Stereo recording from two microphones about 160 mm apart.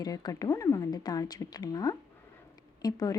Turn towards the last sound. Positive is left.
turn(degrees=20)  # may be behind; listen again after turning